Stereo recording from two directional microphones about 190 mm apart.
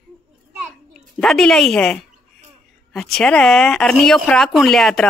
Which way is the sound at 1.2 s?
Centre (ahead or behind).